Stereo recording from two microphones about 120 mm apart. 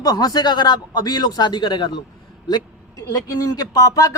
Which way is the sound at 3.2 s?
30° left (ahead or behind).